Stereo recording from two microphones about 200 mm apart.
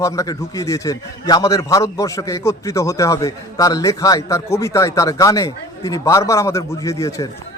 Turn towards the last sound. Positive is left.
turn(degrees=15)  # may be behind; listen again after turning